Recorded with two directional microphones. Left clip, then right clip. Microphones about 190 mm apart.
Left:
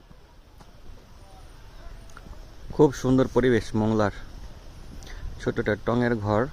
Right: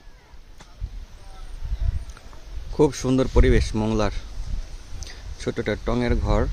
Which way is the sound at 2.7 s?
10° right (ahead or behind).